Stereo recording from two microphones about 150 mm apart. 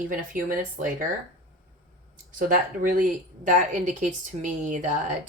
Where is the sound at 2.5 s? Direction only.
60° right (ahead or behind).